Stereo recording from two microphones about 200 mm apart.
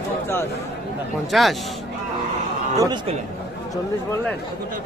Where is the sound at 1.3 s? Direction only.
Centre (ahead or behind).